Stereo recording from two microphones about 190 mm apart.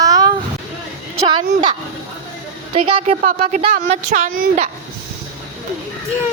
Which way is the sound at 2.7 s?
30° right (ahead or behind).